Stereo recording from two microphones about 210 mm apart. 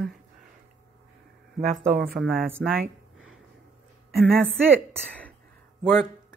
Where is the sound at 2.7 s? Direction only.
Centre (ahead or behind).